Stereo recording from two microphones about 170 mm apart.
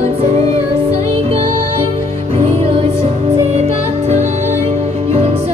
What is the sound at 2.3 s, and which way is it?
Music, 35° right (ahead or behind).